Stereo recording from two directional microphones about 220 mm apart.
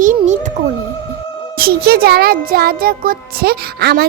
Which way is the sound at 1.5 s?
45° right (ahead or behind).